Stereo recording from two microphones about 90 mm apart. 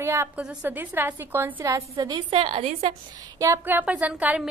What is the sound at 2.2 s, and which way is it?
Speech, 85° right.